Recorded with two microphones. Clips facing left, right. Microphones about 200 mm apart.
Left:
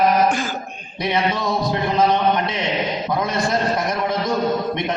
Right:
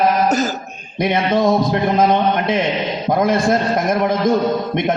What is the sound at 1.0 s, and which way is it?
A man's voice, 50° right (ahead or behind).